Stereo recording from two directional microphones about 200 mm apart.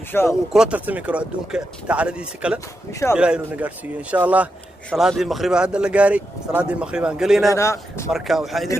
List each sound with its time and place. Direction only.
0.1 s a man's voice: 10° left (ahead or behind)
0.5 s speech: 5° right (ahead or behind)
2.9 s a man's voice: 15° left (ahead or behind)
3.2 s speech: 5° right (ahead or behind)
7.5 s a man's voice: 15° left (ahead or behind)
8.1 s speech: centre (ahead or behind)